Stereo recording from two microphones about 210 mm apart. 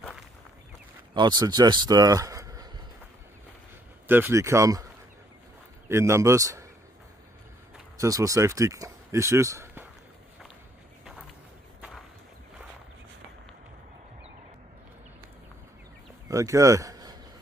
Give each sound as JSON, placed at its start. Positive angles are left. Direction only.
{"t": 1.1, "sound": "speech", "side_deg": -20}
{"t": 4.1, "sound": "speech", "side_deg": -10}
{"t": 5.9, "sound": "speech", "side_deg": -15}
{"t": 8.0, "sound": "speech", "side_deg": -15}
{"t": 16.3, "sound": "a sound", "side_deg": -15}